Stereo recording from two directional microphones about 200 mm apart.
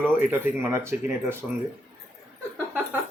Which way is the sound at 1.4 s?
Centre (ahead or behind).